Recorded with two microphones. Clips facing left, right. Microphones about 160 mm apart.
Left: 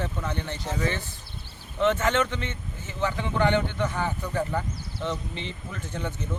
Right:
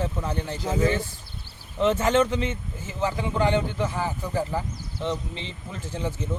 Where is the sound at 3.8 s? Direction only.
5° right (ahead or behind).